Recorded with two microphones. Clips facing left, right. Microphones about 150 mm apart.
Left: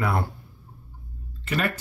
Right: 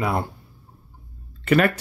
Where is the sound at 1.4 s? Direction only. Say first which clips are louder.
Right 9 dB; 60° right (ahead or behind).